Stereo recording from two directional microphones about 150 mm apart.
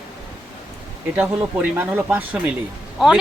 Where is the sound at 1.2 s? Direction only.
10° right (ahead or behind).